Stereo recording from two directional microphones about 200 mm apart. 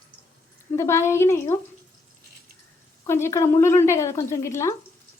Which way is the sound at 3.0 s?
15° left (ahead or behind).